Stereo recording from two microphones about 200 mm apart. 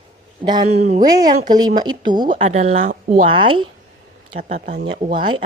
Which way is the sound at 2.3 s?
35° right (ahead or behind).